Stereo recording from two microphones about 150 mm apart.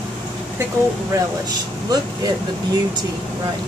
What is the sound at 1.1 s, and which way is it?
Speech, 20° right (ahead or behind).